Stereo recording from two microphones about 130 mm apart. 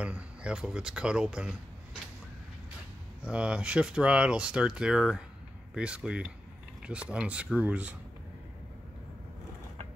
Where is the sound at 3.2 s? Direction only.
10° right (ahead or behind).